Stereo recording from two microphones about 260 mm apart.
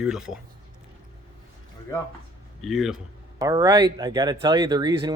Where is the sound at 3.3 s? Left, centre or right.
Centre.